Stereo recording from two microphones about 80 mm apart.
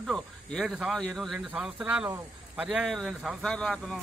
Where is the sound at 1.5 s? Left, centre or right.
Centre.